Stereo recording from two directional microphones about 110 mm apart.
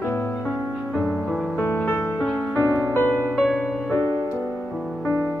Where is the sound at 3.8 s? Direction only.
15° left (ahead or behind).